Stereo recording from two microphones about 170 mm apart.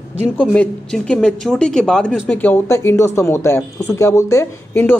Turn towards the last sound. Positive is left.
turn(degrees=15)  # may be behind; listen again after turning